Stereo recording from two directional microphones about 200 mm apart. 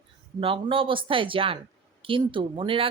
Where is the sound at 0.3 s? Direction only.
25° right (ahead or behind).